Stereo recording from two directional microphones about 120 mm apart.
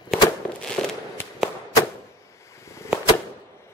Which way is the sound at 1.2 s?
20° left (ahead or behind).